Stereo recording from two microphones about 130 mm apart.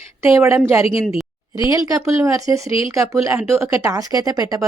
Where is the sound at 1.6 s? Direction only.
25° right (ahead or behind).